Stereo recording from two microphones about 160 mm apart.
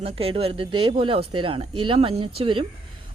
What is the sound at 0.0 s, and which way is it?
A woman's voice, 35° right (ahead or behind).